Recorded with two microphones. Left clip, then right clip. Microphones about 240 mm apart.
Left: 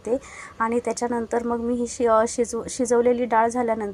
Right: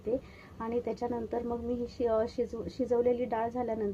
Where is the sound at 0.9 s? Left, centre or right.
Centre.